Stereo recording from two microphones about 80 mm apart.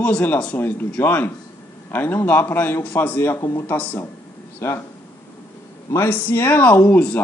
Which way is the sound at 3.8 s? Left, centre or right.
Left.